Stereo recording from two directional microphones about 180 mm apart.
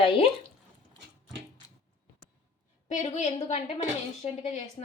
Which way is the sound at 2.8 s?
40° left (ahead or behind).